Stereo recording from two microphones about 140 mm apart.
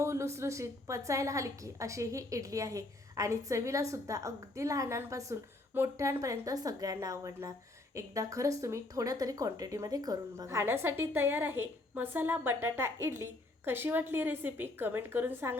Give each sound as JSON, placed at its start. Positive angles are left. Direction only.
{"t": 0.0, "sound": "a woman's voice", "side_deg": -20}